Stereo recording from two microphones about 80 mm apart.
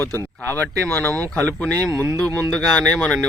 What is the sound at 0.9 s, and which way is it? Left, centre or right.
Speech, left.